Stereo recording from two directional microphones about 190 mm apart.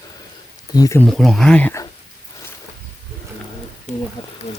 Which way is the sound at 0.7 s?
15° left (ahead or behind).